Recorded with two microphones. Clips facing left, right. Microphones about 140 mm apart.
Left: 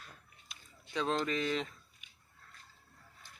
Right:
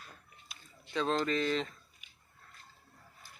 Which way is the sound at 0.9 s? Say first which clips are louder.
Right 2 dB; 15° left (ahead or behind).